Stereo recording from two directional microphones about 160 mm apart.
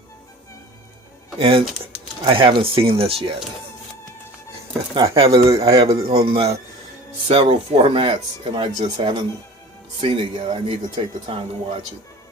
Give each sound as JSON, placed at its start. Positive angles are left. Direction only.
{"t": 1.4, "sound": "speech", "side_deg": -35}
{"t": 5.1, "sound": "speech", "side_deg": -35}